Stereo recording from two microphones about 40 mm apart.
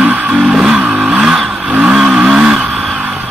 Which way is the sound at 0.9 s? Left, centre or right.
Right.